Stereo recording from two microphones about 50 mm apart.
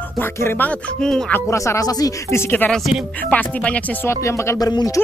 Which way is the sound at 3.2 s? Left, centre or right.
Left.